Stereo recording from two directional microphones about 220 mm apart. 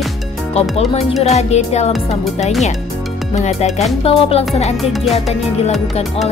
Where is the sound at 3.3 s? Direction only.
30° left (ahead or behind).